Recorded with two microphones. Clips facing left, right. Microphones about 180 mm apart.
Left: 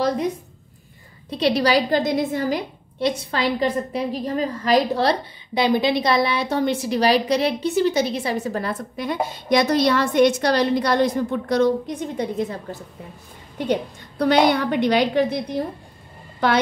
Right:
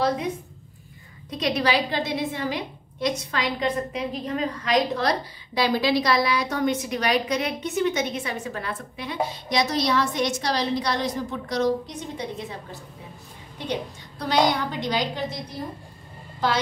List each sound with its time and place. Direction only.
1.3 s a woman's voice: 35° left (ahead or behind)
3.0 s a woman's voice: 30° left (ahead or behind); by 12.5 s 50° left (ahead or behind)
13.7 s a woman's voice: 60° left (ahead or behind)